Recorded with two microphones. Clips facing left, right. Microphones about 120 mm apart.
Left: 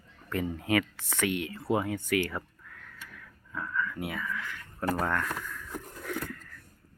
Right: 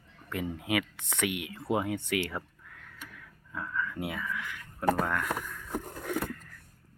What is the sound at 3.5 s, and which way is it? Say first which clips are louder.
Whispering: left 1 dB; 20° right (ahead or behind).